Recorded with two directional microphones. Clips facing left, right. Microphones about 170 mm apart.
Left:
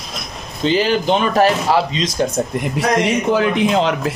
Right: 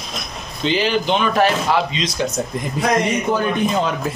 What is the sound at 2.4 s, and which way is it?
Speech, 50° left (ahead or behind).